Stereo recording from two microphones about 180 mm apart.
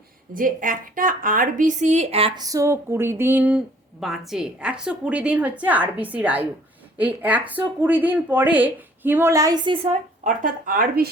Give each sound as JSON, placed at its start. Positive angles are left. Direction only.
{"t": 0.3, "sound": "speech", "side_deg": -50}
{"t": 2.4, "sound": "speech", "side_deg": -20}